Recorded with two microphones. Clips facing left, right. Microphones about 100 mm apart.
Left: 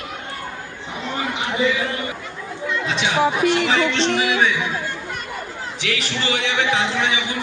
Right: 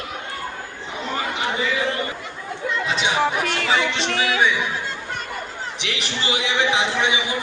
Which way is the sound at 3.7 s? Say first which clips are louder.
Left 3 dB; 5° right (ahead or behind).